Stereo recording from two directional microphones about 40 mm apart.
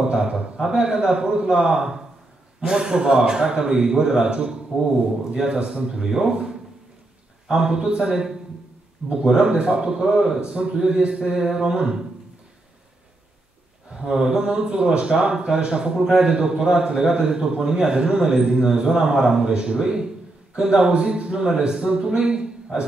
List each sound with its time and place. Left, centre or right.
0.0 s a man's voice: centre
7.4 s a man's voice: centre
13.9 s a man's voice: centre
18.7 s a man's voice: centre